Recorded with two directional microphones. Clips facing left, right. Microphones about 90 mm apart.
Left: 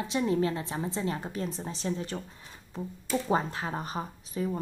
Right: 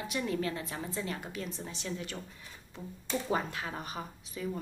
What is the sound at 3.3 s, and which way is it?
A woman's voice, 30° left (ahead or behind).